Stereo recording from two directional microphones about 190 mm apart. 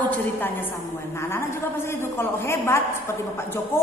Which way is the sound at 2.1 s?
15° left (ahead or behind).